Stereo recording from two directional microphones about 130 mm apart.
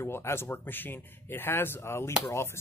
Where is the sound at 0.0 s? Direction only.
20° left (ahead or behind).